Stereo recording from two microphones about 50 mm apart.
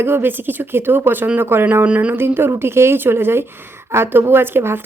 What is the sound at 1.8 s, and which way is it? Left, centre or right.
Speech, right.